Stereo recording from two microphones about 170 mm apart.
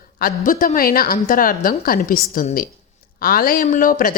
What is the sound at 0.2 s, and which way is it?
Speech, 55° left (ahead or behind).